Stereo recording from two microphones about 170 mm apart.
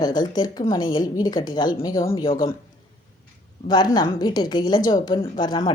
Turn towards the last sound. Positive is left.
turn(degrees=25)  # may be behind; listen again after turning